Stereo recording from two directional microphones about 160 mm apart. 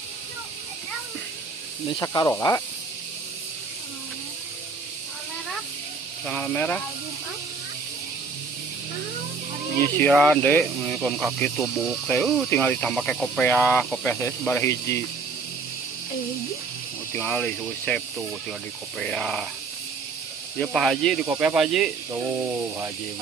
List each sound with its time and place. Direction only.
1.9 s speech: 25° left (ahead or behind)
6.2 s speech: 10° left (ahead or behind)
9.8 s speech: 10° left (ahead or behind)
12.5 s speech: 10° left (ahead or behind)
17.1 s speech: 10° left (ahead or behind)
20.6 s speech: centre (ahead or behind)
21.2 s speech: 10° right (ahead or behind)